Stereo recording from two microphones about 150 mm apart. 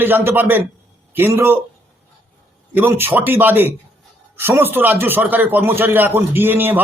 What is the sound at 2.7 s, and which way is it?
A man's voice, 15° right (ahead or behind).